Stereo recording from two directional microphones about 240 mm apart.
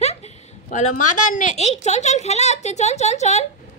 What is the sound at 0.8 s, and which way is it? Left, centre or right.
Speech, left.